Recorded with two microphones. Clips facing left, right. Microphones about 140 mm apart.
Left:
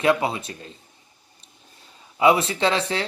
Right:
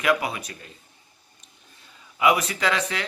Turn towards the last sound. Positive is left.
turn(degrees=30)  # may be behind; listen again after turning